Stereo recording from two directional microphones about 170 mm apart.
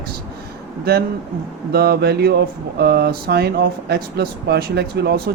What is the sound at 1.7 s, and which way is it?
Speech, 70° right (ahead or behind).